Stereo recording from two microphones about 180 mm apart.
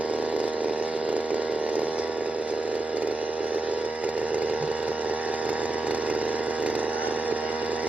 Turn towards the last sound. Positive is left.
turn(degrees=-5)  # may be behind; listen again after turning